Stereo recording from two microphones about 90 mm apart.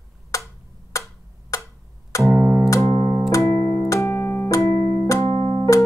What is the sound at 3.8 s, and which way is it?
Keyboard, 30° left (ahead or behind).